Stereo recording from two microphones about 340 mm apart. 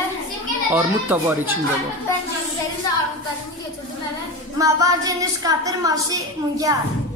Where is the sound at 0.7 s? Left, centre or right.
Centre.